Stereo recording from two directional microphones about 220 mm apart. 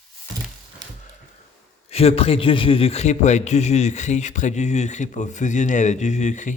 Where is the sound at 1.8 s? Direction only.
25° left (ahead or behind).